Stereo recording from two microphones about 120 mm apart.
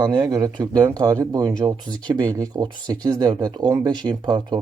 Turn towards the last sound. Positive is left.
turn(degrees=-35)  # may be behind; listen again after turning